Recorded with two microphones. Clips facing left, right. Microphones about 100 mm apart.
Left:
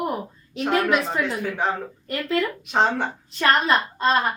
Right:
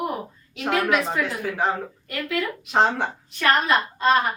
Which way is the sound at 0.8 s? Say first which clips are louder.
Even; centre (ahead or behind).